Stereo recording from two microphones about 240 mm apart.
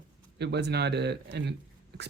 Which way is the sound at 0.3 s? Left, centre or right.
Right.